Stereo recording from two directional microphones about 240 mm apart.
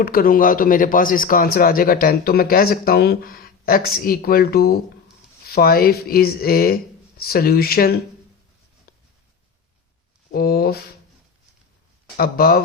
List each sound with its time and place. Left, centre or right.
0.0 s a man's voice: left
10.3 s a man's voice: left
12.1 s a man's voice: left